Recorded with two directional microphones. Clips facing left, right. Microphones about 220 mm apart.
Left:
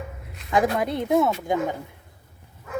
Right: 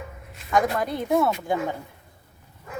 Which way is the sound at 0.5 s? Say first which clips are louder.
Left 1 dB; 25° left (ahead or behind).